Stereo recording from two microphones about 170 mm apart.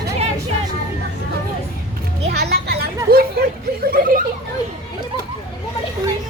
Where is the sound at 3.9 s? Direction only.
55° right (ahead or behind).